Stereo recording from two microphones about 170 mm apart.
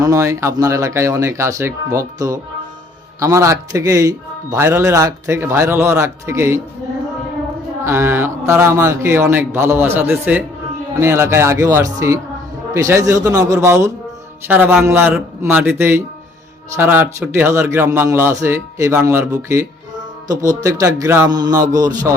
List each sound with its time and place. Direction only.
0.0 s a man's voice: 20° right (ahead or behind)
7.9 s a man's voice: 15° right (ahead or behind)